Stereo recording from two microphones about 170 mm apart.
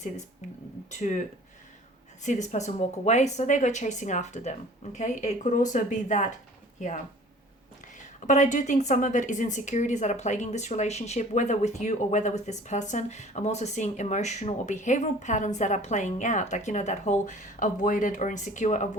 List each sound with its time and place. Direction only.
0.4 s a woman's voice: 45° left (ahead or behind)
2.2 s a woman's voice: 45° left (ahead or behind)
8.2 s a woman's voice: 45° left (ahead or behind)